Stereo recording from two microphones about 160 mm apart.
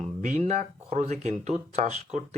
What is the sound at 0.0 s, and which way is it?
Speech, 45° right (ahead or behind).